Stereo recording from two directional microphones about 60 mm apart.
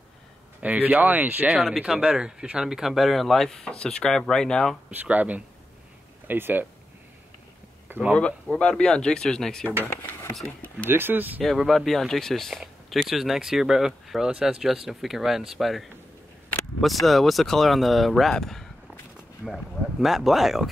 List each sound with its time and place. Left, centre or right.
0.6 s speech: right
1.5 s speech: centre
4.9 s speech: right
8.2 s speech: centre
10.9 s speech: right
11.4 s speech: centre